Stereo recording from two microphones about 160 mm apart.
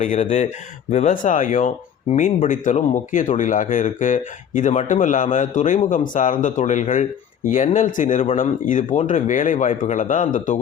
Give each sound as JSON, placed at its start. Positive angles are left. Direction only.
{"t": 0.0, "sound": "speech", "side_deg": 50}